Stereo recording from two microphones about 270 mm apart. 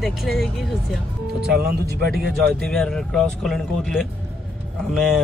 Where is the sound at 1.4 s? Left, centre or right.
Right.